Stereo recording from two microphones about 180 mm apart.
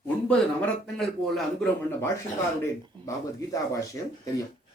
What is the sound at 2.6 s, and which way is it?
Speech, 15° left (ahead or behind).